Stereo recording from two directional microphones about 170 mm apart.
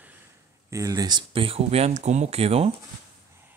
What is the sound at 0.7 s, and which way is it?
Speech, 20° right (ahead or behind).